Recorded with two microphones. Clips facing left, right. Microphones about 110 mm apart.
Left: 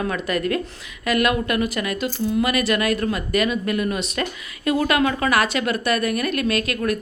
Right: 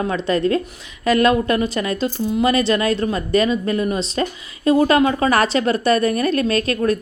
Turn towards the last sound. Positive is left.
turn(degrees=-30)  # may be behind; listen again after turning